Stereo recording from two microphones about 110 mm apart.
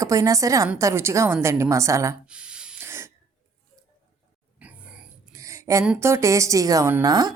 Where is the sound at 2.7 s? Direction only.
20° right (ahead or behind).